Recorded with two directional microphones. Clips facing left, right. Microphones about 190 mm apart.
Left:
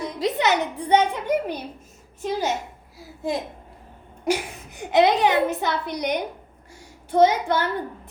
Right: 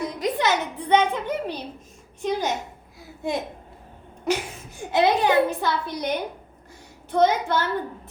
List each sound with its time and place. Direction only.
0.0 s a woman's voice: 25° left (ahead or behind); by 2.6 s 10° left (ahead or behind)
4.3 s a woman's voice: 20° left (ahead or behind)